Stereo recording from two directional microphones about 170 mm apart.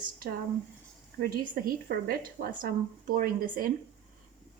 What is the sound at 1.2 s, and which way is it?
A woman's voice, 65° right (ahead or behind).